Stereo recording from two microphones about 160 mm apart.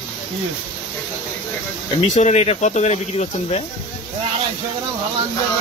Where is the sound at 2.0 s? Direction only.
45° left (ahead or behind).